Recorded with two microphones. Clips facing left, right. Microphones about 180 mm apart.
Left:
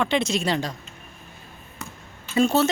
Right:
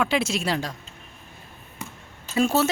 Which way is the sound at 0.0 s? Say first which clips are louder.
Left 1 dB; 5° right (ahead or behind).